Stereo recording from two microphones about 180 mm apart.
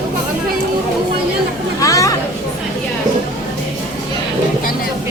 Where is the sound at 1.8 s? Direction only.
20° left (ahead or behind).